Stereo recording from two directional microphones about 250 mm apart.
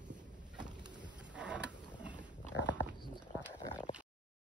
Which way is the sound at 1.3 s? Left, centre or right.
Centre.